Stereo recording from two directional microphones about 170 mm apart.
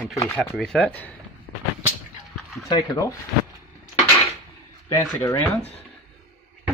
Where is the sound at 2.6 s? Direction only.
20° left (ahead or behind).